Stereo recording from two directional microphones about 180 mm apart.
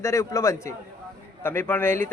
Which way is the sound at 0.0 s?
15° left (ahead or behind).